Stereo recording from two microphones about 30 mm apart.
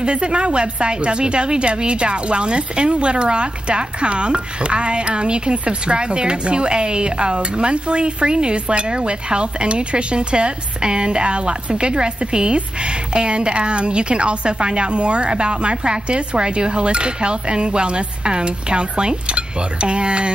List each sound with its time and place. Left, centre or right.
0.0 s a woman's voice: right